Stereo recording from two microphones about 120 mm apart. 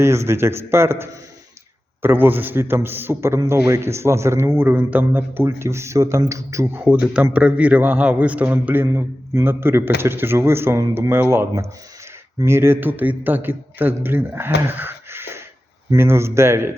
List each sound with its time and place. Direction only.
0.0 s a man's voice: 20° right (ahead or behind)
6.8 s a man's voice: 10° right (ahead or behind)